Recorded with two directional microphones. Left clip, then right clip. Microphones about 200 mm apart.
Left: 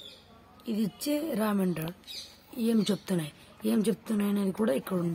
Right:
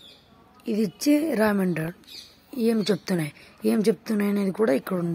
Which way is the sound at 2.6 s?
35° right (ahead or behind).